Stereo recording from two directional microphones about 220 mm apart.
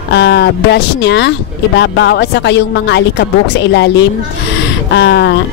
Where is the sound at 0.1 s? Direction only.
50° left (ahead or behind).